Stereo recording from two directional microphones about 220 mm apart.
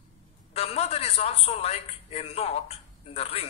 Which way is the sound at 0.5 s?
30° left (ahead or behind).